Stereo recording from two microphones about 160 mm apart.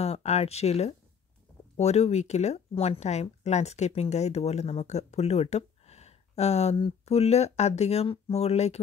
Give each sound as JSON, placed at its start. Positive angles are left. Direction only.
{"t": 0.0, "sound": "speech", "side_deg": 40}